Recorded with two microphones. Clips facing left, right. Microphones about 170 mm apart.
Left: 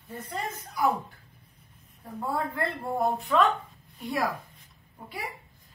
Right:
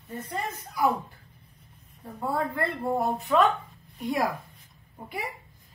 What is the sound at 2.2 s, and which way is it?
Speech, centre (ahead or behind).